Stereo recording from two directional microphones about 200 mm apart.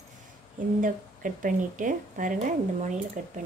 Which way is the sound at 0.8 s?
40° right (ahead or behind).